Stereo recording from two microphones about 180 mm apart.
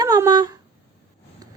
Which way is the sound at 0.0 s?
20° right (ahead or behind).